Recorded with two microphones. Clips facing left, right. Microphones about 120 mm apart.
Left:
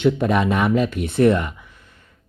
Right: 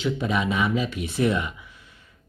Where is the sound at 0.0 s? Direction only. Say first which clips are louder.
Left 7 dB; 55° left (ahead or behind).